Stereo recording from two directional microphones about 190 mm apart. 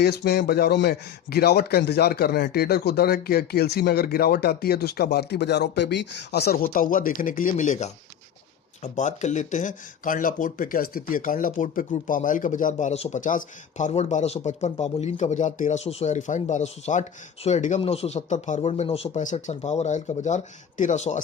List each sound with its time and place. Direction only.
0.0 s speech: 60° left (ahead or behind); by 21.2 s 40° left (ahead or behind)